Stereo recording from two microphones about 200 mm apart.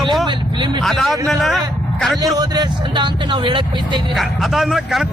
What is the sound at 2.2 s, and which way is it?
Speech, 20° right (ahead or behind).